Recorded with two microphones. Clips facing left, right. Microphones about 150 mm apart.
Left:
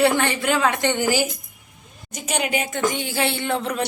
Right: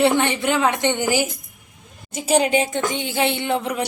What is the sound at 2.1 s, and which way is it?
A woman's voice, 30° right (ahead or behind).